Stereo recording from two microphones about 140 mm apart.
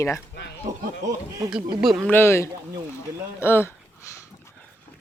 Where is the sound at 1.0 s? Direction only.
25° right (ahead or behind).